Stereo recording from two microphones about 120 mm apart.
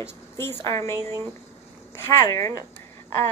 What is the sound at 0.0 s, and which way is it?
A woman's voice, 20° left (ahead or behind).